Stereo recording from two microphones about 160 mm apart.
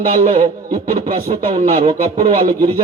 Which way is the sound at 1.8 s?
45° right (ahead or behind).